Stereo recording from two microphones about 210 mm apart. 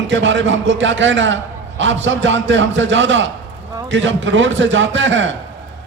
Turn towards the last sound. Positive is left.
turn(degrees=-60)  # may be behind; listen again after turning